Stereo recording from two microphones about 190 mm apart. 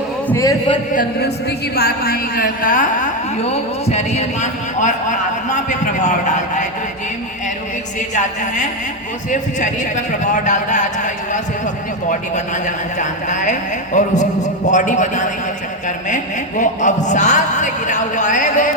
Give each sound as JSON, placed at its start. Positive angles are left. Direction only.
{"t": 0.3, "sound": "a man's voice", "side_deg": 15}
{"t": 0.9, "sound": "a woman's voice", "side_deg": 55}
{"t": 8.1, "sound": "a woman's voice", "side_deg": 40}